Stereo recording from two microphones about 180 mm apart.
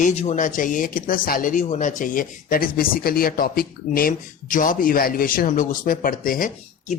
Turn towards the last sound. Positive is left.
turn(degrees=45)  # may be behind; listen again after turning